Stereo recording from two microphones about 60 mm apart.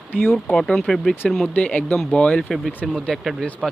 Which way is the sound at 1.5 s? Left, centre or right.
Left.